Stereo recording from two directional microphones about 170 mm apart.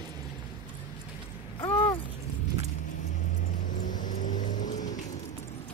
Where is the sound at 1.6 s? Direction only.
35° left (ahead or behind).